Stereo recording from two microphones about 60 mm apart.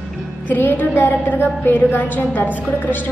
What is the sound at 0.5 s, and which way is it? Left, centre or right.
A woman's voice, left.